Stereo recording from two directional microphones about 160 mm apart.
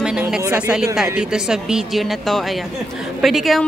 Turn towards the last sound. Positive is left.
turn(degrees=0)  # may be behind; listen again after turning